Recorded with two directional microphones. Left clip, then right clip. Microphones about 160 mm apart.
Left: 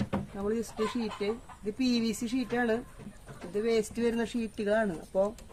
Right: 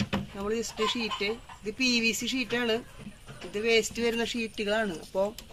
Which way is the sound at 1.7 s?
30° left (ahead or behind).